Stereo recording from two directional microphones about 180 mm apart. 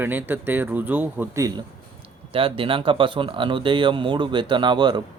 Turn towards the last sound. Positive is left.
turn(degrees=-25)  # may be behind; listen again after turning